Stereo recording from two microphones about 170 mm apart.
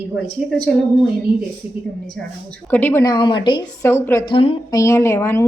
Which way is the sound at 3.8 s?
15° left (ahead or behind).